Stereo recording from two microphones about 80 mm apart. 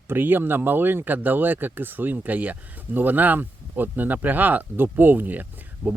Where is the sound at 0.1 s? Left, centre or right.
Right.